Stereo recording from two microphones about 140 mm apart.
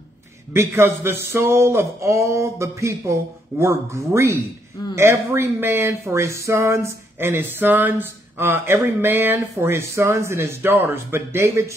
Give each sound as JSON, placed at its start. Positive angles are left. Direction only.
{"t": 0.5, "sound": "speech", "side_deg": -20}